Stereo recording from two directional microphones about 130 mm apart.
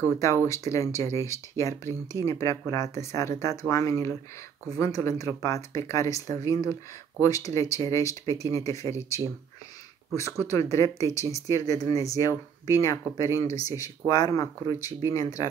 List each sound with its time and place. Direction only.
0.0 s speech: 25° left (ahead or behind)
10.4 s speech: 25° left (ahead or behind)